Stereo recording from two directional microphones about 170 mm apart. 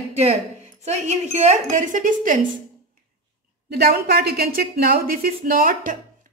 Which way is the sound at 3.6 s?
70° right (ahead or behind).